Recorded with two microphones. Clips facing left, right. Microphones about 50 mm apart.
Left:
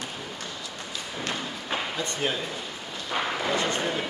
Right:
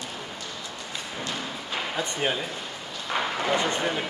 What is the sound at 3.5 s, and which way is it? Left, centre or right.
Speech, right.